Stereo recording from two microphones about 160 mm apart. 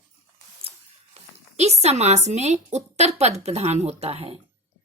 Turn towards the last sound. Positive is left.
turn(degrees=-40)  # may be behind; listen again after turning